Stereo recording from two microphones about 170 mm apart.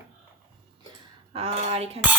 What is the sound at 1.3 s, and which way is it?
Speech, 40° right (ahead or behind).